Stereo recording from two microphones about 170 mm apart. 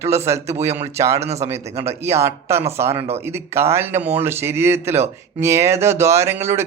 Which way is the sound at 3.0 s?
35° right (ahead or behind).